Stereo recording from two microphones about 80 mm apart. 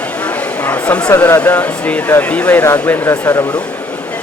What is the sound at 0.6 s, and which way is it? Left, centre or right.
Speech, centre.